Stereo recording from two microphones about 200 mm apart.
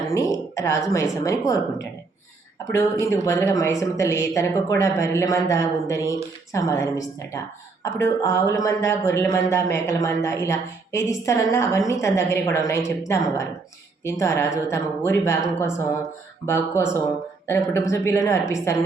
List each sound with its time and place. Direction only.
0.1 s speech: 15° left (ahead or behind)
3.0 s speech: 15° left (ahead or behind)